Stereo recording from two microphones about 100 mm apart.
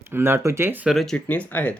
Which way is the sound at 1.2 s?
15° left (ahead or behind).